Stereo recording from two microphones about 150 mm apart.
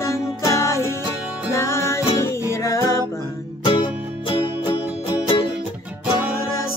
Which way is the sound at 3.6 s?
35° left (ahead or behind).